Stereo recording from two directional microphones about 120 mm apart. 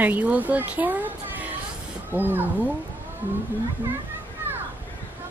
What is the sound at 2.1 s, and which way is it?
Speech, 15° right (ahead or behind).